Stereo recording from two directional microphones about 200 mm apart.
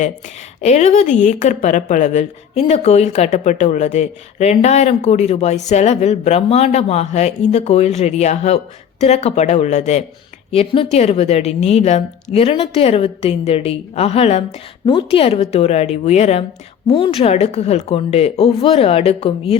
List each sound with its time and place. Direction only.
0.6 s a woman's voice: 35° left (ahead or behind)